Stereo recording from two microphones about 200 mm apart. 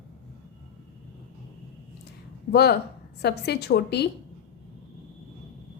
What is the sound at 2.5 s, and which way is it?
A woman's voice, 55° left (ahead or behind).